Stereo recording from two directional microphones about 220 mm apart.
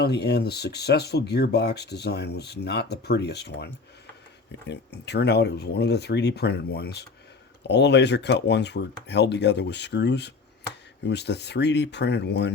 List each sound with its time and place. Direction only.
0.0 s speech: 50° left (ahead or behind)